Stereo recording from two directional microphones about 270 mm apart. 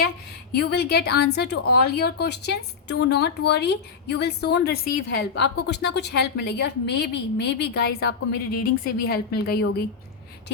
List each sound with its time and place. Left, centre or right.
0.5 s speech: left